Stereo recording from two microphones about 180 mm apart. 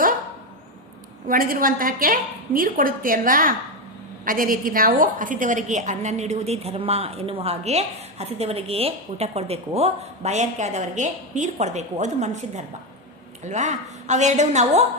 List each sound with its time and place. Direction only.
1.3 s a woman's voice: 50° right (ahead or behind)